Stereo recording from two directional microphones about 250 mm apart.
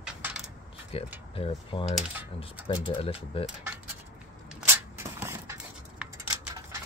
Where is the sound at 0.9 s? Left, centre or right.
Left.